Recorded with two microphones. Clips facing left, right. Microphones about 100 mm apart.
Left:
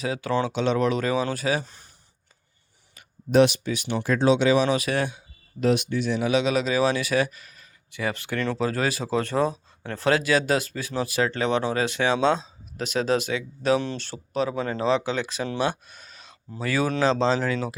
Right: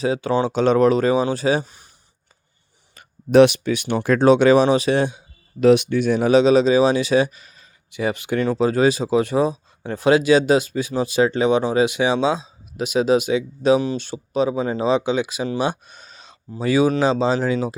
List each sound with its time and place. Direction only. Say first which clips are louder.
0.0 s speech: right 5 dB; 25° right (ahead or behind)
0.5 s speech: right 11 dB; 45° right (ahead or behind); by 1.6 s 30° right (ahead or behind)
1.6 s speech: right 1 dB; 10° right (ahead or behind)
3.3 s speech: right 6 dB; 65° right (ahead or behind)
4.6 s speech: right 6 dB; 30° right (ahead or behind)
5.5 s speech: right 8 dB; 75° right (ahead or behind); by 15.4 s 15° right (ahead or behind)
15.4 s a sound: right 4 dB; 15° right (ahead or behind)
16.6 s speech: right 7 dB; 15° right (ahead or behind)